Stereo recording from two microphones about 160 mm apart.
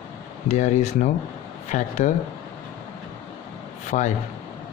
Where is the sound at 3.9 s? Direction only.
50° left (ahead or behind).